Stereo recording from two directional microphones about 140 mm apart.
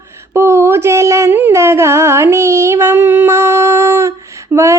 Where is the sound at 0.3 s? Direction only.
20° right (ahead or behind).